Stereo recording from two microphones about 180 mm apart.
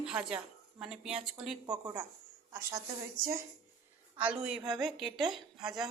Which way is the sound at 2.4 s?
15° right (ahead or behind).